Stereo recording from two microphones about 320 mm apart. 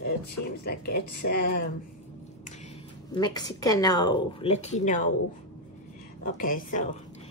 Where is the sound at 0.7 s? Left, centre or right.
Left.